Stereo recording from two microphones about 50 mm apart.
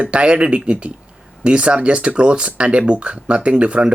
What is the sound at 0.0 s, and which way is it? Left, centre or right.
Speech, right.